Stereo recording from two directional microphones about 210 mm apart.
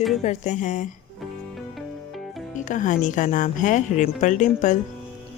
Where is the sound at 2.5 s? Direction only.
35° left (ahead or behind).